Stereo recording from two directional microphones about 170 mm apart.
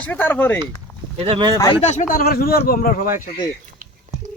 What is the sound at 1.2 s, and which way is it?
Speech, 30° right (ahead or behind).